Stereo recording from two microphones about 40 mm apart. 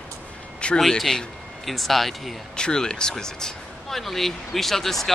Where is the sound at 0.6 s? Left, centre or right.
Left.